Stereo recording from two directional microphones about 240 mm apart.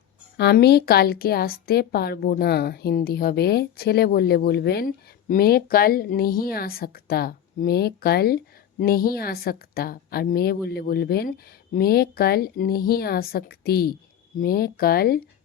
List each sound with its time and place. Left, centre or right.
0.3 s a woman's voice: left